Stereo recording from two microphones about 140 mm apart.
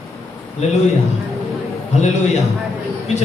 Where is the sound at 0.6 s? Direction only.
50° left (ahead or behind).